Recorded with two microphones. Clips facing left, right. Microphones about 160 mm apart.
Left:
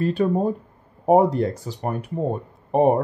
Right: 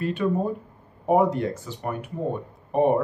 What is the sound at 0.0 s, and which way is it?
Speech, 35° left (ahead or behind).